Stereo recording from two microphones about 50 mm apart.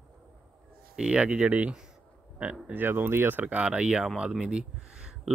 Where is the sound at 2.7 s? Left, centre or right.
Right.